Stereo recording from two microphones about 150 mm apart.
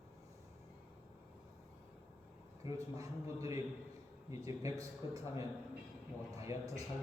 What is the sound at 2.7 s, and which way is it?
A man's voice, 20° right (ahead or behind).